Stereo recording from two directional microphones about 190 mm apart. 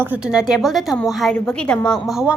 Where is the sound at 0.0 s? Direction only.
5° right (ahead or behind).